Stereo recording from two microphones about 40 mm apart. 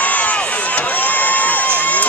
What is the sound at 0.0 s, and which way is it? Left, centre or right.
Crowd, left.